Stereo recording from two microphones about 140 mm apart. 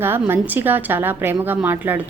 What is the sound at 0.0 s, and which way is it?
Speech, 15° right (ahead or behind).